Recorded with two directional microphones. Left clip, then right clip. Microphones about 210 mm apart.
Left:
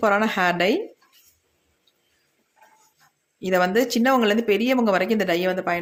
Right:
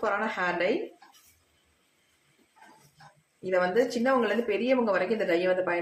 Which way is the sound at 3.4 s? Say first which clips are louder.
Left 5 dB; 50° left (ahead or behind).